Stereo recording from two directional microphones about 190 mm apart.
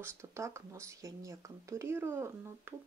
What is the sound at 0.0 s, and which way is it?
Speech, 15° right (ahead or behind).